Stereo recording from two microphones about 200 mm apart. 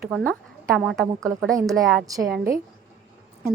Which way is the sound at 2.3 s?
15° right (ahead or behind).